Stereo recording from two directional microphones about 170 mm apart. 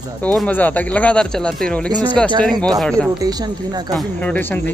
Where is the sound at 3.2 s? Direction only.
25° right (ahead or behind).